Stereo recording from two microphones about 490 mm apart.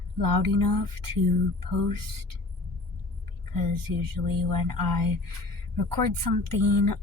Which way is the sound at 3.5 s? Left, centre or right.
Right.